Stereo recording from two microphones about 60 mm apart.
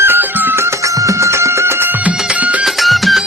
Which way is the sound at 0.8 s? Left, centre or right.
Right.